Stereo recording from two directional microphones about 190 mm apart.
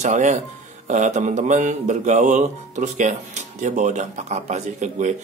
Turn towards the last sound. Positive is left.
turn(degrees=-40)  # may be behind; listen again after turning